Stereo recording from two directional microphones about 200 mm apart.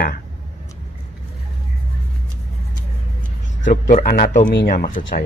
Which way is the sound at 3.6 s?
40° left (ahead or behind).